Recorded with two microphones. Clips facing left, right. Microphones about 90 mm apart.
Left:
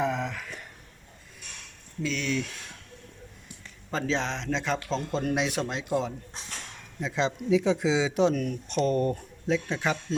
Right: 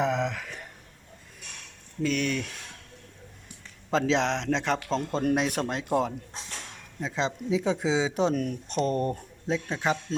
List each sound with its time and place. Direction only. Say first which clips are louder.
0.0 s a sound: right 2 dB; 75° right (ahead or behind)
2.0 s speech: right 2 dB; 55° right (ahead or behind)
3.9 s speech: right 4 dB; 90° right; by 6.1 s 55° right (ahead or behind)
7.0 s speech: left 1 dB; 30° right (ahead or behind)